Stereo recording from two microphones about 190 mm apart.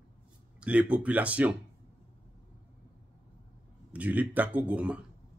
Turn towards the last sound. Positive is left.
turn(degrees=-5)  # may be behind; listen again after turning